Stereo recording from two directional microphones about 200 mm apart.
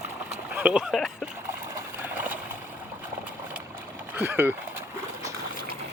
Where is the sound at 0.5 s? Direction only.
5° right (ahead or behind).